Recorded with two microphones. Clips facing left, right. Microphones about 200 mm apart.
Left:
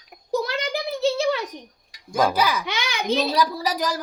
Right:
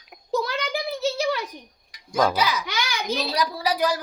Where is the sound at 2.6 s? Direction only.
25° left (ahead or behind).